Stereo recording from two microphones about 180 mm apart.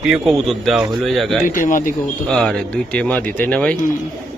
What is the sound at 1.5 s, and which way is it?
Speech, 45° left (ahead or behind).